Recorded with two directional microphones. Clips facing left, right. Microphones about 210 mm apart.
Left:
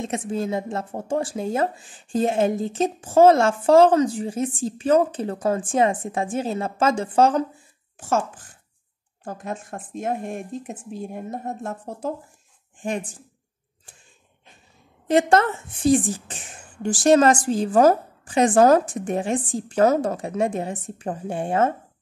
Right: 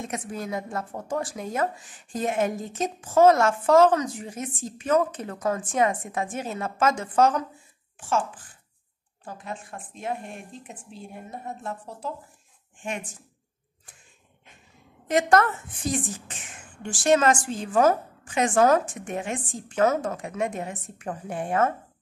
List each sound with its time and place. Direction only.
0.0 s speech: 25° left (ahead or behind)
9.2 s speech: 45° left (ahead or behind)
12.8 s a woman's voice: 35° left (ahead or behind)
15.0 s a woman's voice: 30° left (ahead or behind)